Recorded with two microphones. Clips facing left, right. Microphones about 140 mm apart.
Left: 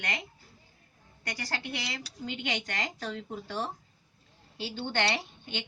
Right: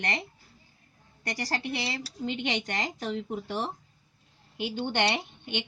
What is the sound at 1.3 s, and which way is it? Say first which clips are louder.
A woman's voice: right 5 dB; 35° right (ahead or behind).